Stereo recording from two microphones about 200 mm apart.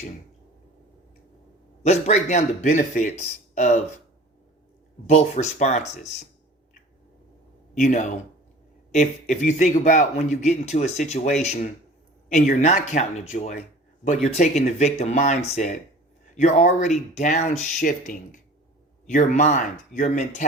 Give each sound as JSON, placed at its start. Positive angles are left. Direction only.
{"t": 1.8, "sound": "speech", "side_deg": 35}
{"t": 5.0, "sound": "speech", "side_deg": 35}
{"t": 7.8, "sound": "speech", "side_deg": 40}